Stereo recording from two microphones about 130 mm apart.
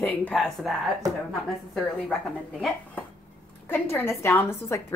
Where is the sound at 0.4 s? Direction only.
Centre (ahead or behind).